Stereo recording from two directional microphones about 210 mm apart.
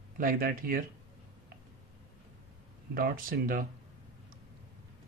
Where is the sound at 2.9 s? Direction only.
45° right (ahead or behind).